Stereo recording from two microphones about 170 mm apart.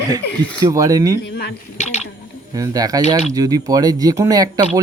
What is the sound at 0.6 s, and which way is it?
Speech, 20° right (ahead or behind).